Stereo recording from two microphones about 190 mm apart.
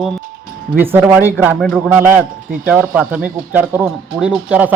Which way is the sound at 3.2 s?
45° right (ahead or behind).